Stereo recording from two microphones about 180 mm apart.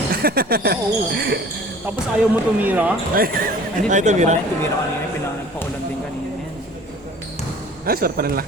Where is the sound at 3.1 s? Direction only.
55° right (ahead or behind).